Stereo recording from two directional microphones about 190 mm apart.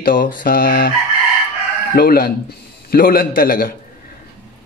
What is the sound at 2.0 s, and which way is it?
Speech, 50° left (ahead or behind).